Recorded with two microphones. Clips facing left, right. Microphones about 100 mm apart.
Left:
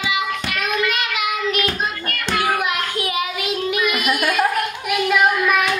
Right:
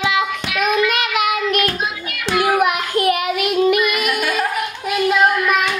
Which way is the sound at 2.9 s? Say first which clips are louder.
Right 6 dB; 60° right (ahead or behind).